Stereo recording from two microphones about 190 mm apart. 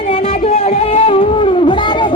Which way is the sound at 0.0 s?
30° left (ahead or behind).